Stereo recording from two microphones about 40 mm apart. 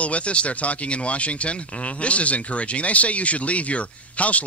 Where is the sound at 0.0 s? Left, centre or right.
Left.